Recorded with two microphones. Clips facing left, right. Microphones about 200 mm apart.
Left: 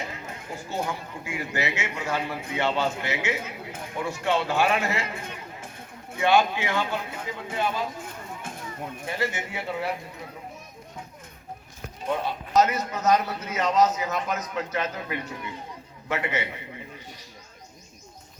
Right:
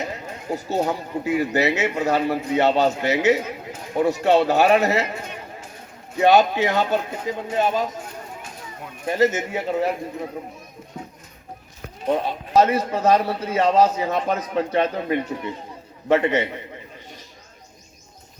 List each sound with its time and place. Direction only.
0.1 s speech: 40° right (ahead or behind)
6.3 s speech: 40° right (ahead or behind)
9.0 s speech: 40° right (ahead or behind)
12.5 s speech: 30° right (ahead or behind)